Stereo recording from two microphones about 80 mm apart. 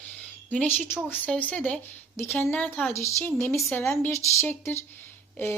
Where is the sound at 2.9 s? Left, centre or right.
Left.